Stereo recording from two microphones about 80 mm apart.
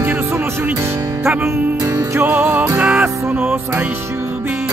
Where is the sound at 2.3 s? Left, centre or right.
Right.